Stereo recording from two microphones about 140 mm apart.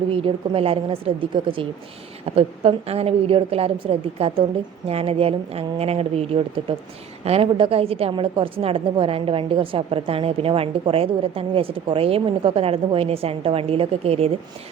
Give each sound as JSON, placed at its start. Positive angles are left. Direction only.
{"t": 0.1, "sound": "a woman's voice", "side_deg": -40}